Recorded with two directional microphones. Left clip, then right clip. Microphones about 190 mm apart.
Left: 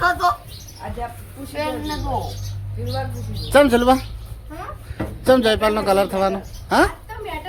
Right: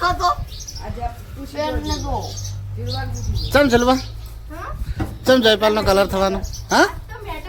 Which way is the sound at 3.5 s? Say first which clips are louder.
Left 1 dB; centre (ahead or behind).